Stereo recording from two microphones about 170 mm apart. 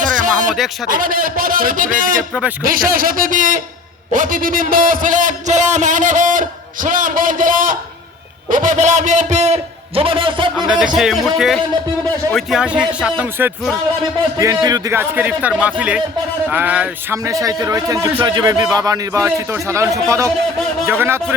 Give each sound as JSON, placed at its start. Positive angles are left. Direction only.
{"t": 0.0, "sound": "a sound", "side_deg": -50}
{"t": 0.9, "sound": "a man's voice", "side_deg": -55}
{"t": 10.7, "sound": "a man's voice", "side_deg": -5}